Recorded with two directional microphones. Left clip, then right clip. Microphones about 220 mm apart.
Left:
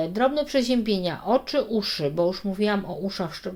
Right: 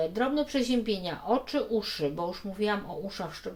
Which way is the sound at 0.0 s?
45° left (ahead or behind).